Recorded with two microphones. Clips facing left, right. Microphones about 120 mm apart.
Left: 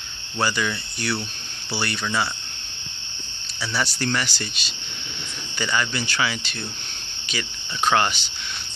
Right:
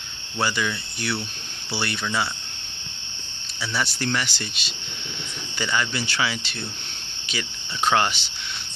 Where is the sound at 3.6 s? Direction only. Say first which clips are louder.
Left 1 dB; centre (ahead or behind).